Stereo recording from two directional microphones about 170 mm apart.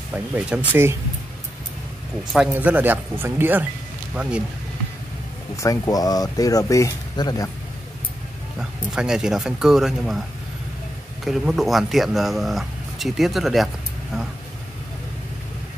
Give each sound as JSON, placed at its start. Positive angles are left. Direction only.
{"t": 0.1, "sound": "speech", "side_deg": -5}
{"t": 2.5, "sound": "speech", "side_deg": -10}
{"t": 5.6, "sound": "speech", "side_deg": 20}
{"t": 8.5, "sound": "speech", "side_deg": -5}
{"t": 11.2, "sound": "speech", "side_deg": 0}